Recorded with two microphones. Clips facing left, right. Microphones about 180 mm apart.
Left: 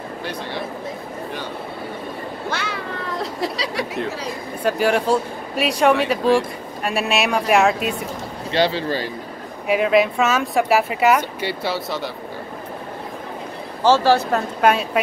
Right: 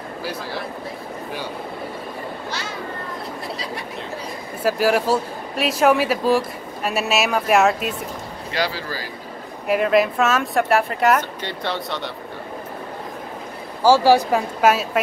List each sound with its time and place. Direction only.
0.2 s speech: 5° right (ahead or behind)
2.5 s cat: 65° left (ahead or behind); by 3.8 s 90° left
4.6 s speech: 5° right (ahead or behind)
8.5 s speech: 25° left (ahead or behind)
9.7 s speech: centre (ahead or behind)
13.8 s speech: 15° right (ahead or behind)